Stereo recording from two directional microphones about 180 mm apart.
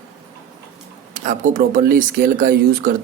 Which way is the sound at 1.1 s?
45° right (ahead or behind).